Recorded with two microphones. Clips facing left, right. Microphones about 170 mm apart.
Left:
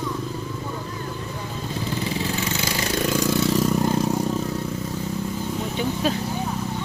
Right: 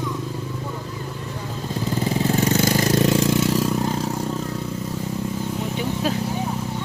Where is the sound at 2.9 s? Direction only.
25° right (ahead or behind).